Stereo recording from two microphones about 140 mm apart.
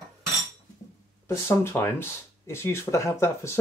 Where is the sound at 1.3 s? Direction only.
20° left (ahead or behind).